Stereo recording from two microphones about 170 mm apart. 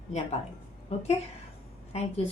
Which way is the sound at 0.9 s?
40° left (ahead or behind).